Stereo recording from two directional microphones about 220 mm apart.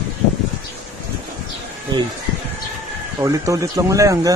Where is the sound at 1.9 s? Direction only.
20° right (ahead or behind).